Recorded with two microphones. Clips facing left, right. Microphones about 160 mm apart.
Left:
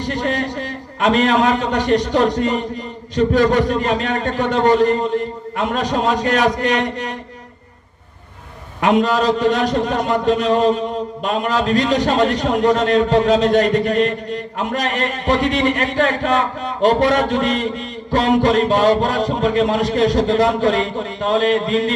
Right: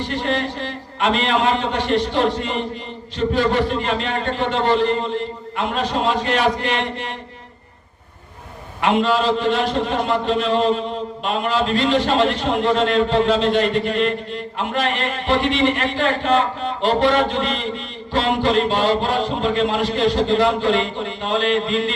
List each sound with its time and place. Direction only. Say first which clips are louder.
0.0 s a man's voice: left 1 dB; 40° left (ahead or behind)
8.8 s a man's voice: left 2 dB; 40° left (ahead or behind)